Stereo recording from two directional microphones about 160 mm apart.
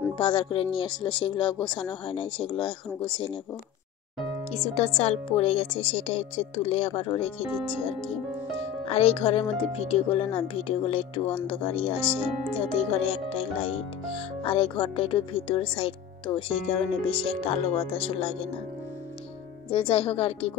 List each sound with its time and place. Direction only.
0.2 s speech: 35° left (ahead or behind)
4.5 s speech: 40° left (ahead or behind)
8.5 s speech: 40° left (ahead or behind)
19.7 s speech: 35° left (ahead or behind)